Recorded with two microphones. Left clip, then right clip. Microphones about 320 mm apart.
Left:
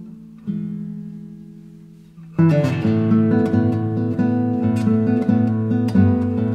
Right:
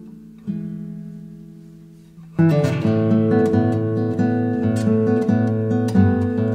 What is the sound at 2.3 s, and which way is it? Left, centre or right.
Music, centre.